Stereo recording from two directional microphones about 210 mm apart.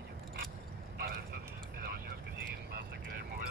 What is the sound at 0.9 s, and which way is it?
Vehicle, 50° right (ahead or behind).